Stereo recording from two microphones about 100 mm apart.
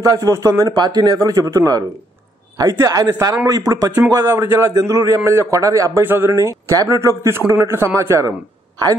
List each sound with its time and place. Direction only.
0.0 s a man's voice: 30° right (ahead or behind)
6.0 s a man's voice: 20° right (ahead or behind)